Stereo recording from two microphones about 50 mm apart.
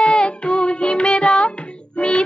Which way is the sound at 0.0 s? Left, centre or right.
Left.